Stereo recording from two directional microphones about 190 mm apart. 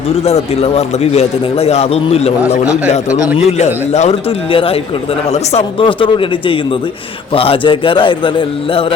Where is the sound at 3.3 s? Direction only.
35° left (ahead or behind).